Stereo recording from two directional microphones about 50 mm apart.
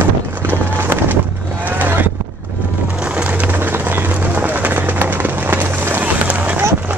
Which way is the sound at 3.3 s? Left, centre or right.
Right.